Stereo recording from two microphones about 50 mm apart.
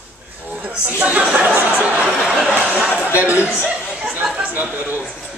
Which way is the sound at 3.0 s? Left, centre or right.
Right.